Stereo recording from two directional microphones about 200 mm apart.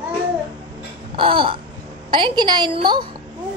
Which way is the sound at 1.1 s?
25° right (ahead or behind).